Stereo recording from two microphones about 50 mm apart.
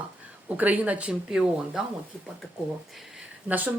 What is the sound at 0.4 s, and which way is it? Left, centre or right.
Speech, right.